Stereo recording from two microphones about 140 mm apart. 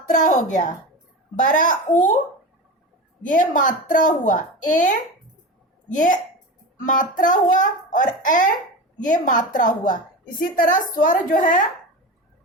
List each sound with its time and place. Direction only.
0.1 s a woman's voice: 65° left (ahead or behind)
3.2 s a woman's voice: 70° left (ahead or behind)